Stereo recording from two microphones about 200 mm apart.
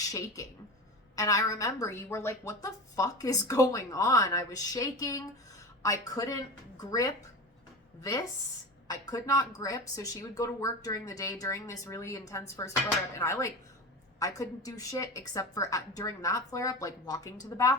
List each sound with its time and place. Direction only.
1.1 s a woman's voice: 15° left (ahead or behind)
8.9 s a woman's voice: 15° left (ahead or behind)